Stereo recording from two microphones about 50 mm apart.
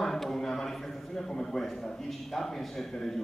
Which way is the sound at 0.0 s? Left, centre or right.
Centre.